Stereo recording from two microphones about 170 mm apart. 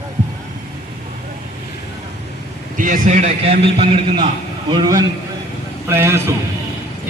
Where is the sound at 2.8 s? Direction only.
50° right (ahead or behind).